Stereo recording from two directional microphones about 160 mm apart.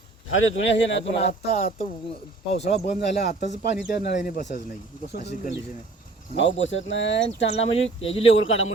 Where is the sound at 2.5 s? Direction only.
40° left (ahead or behind).